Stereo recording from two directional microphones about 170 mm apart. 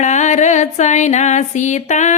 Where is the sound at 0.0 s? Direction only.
45° left (ahead or behind).